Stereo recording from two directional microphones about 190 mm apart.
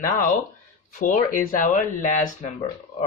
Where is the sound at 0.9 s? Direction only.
45° left (ahead or behind).